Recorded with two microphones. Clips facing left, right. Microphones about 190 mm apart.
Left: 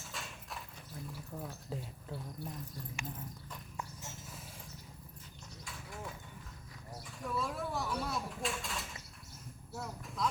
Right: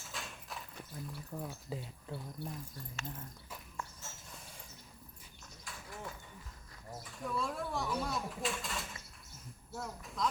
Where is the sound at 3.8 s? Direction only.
15° left (ahead or behind).